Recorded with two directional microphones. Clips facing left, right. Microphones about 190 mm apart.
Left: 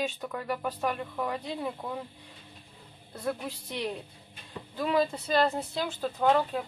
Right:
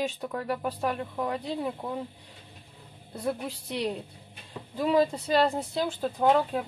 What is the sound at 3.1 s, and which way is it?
Speech, 10° right (ahead or behind).